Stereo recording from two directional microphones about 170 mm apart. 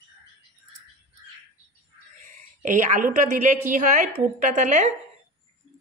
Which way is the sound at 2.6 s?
45° right (ahead or behind).